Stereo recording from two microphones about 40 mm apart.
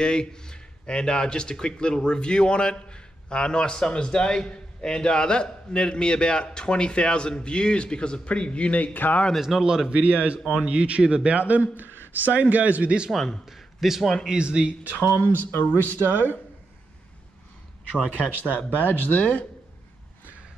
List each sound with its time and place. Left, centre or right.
0.0 s speech: left
8.9 s speech: left
9.4 s speech: centre
9.8 s a man's voice: right
11.3 s a man's voice: right
13.5 s a sound: centre
14.2 s speech: right
14.8 s speech: right
15.7 s speech: left
18.1 s speech: left